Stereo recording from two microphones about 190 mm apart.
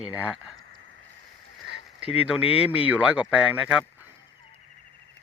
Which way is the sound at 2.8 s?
5° right (ahead or behind).